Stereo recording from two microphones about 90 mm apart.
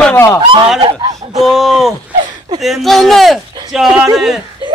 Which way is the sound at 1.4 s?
Centre (ahead or behind).